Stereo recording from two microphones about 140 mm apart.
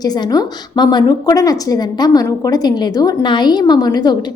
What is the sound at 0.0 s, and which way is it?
A woman's voice, 30° left (ahead or behind).